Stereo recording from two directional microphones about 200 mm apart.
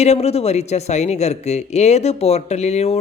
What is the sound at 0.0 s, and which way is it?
Speech, 30° left (ahead or behind).